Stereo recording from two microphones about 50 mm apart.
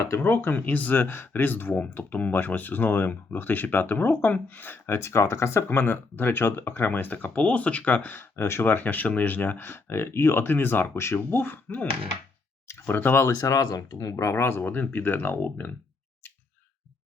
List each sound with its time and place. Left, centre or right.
0.2 s speech: left
4.9 s speech: left
5.6 s speech: left
8.4 s speech: left
8.6 s speech: left
9.6 s speech: left
12.9 s speech: left
13.2 s speech: left
14.1 s speech: left
14.6 s speech: left